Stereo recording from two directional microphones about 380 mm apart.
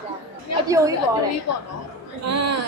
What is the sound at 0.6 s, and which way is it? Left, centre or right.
Speech, centre.